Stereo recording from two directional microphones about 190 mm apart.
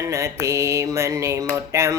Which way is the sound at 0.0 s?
15° right (ahead or behind).